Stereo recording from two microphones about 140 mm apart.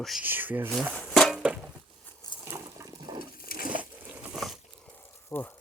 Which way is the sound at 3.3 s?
90° left.